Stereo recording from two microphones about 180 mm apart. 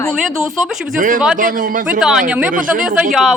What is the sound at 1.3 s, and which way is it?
Speech, 50° right (ahead or behind).